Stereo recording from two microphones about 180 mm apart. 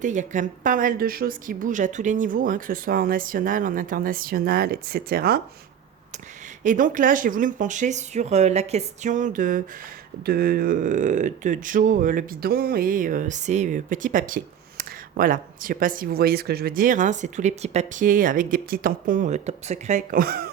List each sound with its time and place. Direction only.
0.0 s speech: 45° right (ahead or behind)
6.6 s speech: 45° right (ahead or behind)
10.2 s speech: 60° right (ahead or behind)